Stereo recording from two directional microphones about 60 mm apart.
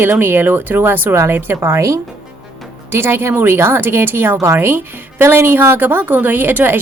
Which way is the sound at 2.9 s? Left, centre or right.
Right.